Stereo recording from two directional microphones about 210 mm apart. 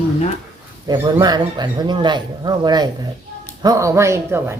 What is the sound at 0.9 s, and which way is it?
Speech, 20° right (ahead or behind).